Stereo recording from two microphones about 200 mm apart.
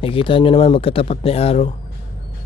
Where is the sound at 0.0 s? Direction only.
25° left (ahead or behind).